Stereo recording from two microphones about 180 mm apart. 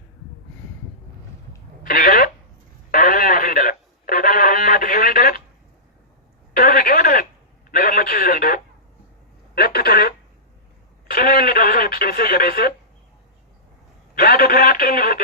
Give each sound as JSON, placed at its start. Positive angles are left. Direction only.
{"t": 1.8, "sound": "a sound", "side_deg": 50}
{"t": 2.9, "sound": "radio", "side_deg": 50}
{"t": 6.6, "sound": "a sound", "side_deg": 55}
{"t": 7.7, "sound": "telephone", "side_deg": 50}
{"t": 11.1, "sound": "radio", "side_deg": 55}
{"t": 14.2, "sound": "telephone", "side_deg": 55}